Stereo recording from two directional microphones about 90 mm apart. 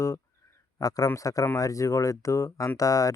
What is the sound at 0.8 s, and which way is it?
Speech, 40° left (ahead or behind).